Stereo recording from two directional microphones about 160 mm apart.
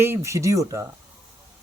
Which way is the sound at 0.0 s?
15° right (ahead or behind).